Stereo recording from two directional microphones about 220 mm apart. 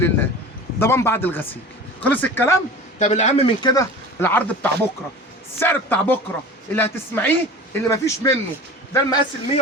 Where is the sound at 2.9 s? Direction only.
30° left (ahead or behind).